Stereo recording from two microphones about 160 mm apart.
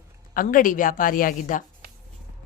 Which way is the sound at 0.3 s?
60° left (ahead or behind).